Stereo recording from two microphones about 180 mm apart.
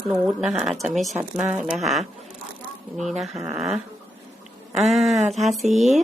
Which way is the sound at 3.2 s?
5° right (ahead or behind).